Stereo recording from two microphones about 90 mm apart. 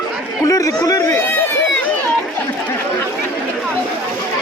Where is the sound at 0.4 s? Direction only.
40° left (ahead or behind).